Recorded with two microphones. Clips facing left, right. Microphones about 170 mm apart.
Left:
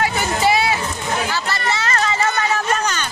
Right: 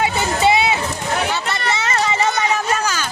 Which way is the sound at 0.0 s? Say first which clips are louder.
Right 1 dB; 20° right (ahead or behind).